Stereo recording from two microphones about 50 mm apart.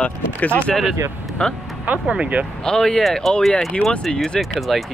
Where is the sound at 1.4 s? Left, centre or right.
Left.